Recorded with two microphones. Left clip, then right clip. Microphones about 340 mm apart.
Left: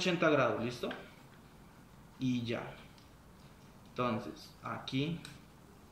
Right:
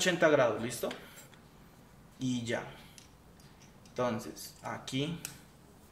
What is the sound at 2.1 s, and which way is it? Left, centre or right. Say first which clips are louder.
Speech: right 2 dB; right.